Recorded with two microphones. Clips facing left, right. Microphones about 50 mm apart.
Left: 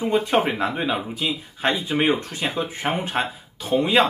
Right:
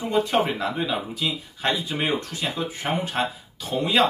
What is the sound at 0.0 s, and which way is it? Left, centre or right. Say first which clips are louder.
Speech: left 2 dB; left.